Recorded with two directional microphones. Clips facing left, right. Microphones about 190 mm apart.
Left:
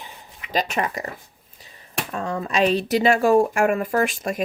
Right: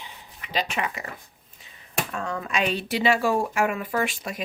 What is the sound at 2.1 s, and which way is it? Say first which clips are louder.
Speech: left 6 dB; 30° left (ahead or behind).